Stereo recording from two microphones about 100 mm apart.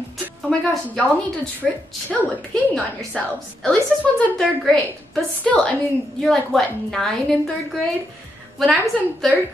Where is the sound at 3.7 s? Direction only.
15° left (ahead or behind).